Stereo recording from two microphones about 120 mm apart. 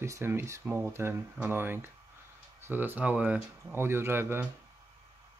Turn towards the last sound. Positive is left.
turn(degrees=-20)  # may be behind; listen again after turning